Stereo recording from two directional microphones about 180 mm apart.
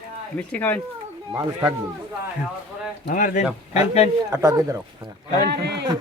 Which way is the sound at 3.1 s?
45° left (ahead or behind).